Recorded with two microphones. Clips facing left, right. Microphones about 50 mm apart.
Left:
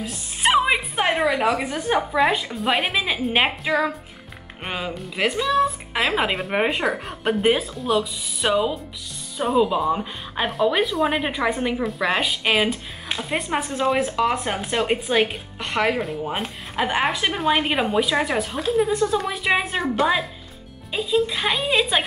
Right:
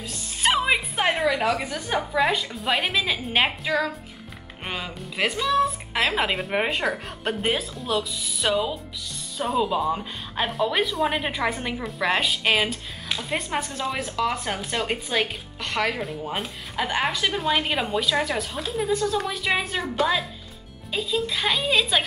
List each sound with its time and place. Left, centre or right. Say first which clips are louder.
0.0 s music: left 2 dB; centre
1.7 s a woman's voice: left 5 dB; left
2.5 s a woman's voice: left 3 dB; centre
3.3 s a woman's voice: left 2 dB; centre
12.6 s speech: left 4 dB; left
16.0 s a woman's voice: left 4 dB; centre
16.7 s a woman's voice: left 3 dB; centre
17.7 s a woman's voice: left 5 dB; centre
18.0 s a woman's voice: left 2 dB; left
18.7 s a woman's voice: left 5 dB; centre
19.1 s a woman's voice: left 3 dB; centre